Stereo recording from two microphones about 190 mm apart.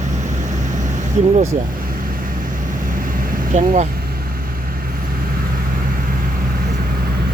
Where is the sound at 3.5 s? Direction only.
40° right (ahead or behind).